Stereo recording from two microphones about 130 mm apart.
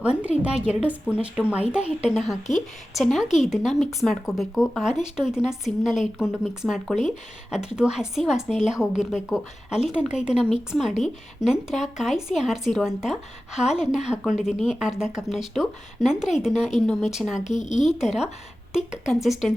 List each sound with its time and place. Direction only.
0.0 s speech: 10° right (ahead or behind)
17.4 s speech: 35° right (ahead or behind)
17.7 s speech: centre (ahead or behind)